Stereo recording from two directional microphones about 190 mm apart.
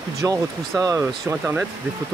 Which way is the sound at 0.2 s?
20° right (ahead or behind).